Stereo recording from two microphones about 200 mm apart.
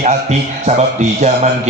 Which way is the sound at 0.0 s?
35° right (ahead or behind).